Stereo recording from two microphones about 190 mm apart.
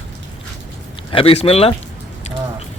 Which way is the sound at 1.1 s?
30° left (ahead or behind).